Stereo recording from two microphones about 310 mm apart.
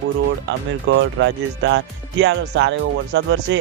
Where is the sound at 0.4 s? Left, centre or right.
Right.